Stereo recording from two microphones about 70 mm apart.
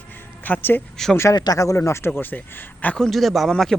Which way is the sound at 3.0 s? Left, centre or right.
Centre.